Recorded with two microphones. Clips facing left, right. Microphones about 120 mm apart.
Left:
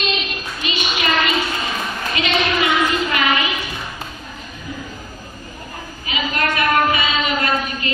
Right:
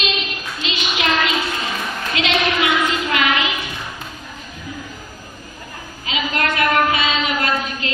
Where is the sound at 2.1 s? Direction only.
75° right (ahead or behind).